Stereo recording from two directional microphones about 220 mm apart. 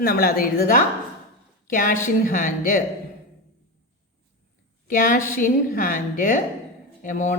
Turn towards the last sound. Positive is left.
turn(degrees=35)  # may be behind; listen again after turning